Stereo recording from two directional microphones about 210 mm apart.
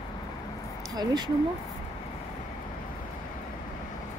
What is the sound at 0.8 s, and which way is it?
Speech, 20° right (ahead or behind).